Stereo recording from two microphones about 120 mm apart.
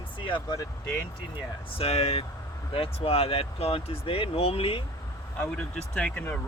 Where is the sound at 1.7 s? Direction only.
55° left (ahead or behind).